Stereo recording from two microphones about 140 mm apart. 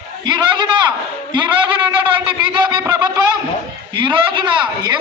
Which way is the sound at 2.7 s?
20° right (ahead or behind).